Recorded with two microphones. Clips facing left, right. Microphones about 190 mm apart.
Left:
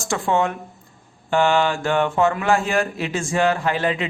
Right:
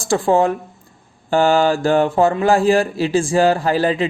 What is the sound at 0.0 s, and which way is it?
Speech, 35° right (ahead or behind).